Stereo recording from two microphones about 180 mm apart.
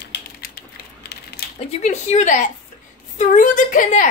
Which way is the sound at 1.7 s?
40° left (ahead or behind).